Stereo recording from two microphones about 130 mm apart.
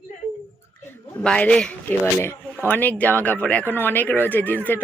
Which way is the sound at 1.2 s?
5° left (ahead or behind).